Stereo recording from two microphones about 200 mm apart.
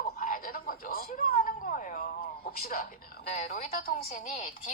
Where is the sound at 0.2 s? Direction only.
45° left (ahead or behind).